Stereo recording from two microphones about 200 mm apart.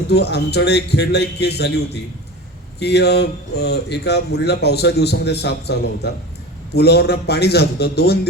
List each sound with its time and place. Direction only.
0.1 s speech: 55° left (ahead or behind)
2.8 s a man's voice: 55° left (ahead or behind)